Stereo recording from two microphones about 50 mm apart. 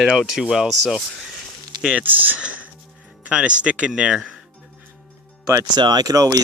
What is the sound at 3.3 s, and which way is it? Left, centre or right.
Speech, right.